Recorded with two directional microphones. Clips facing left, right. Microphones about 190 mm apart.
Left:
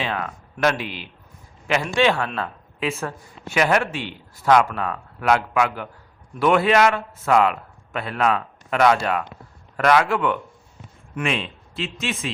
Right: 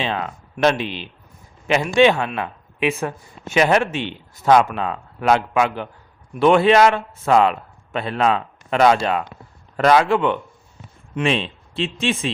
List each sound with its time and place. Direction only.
0.0 s a man's voice: 25° right (ahead or behind)